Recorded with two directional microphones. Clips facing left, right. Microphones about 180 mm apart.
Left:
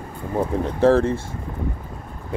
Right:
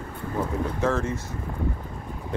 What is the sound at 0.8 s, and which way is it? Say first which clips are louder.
Speech: left 11 dB; 30° left (ahead or behind).